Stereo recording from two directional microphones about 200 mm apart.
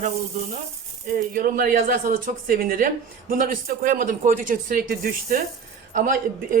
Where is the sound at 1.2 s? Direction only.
45° right (ahead or behind).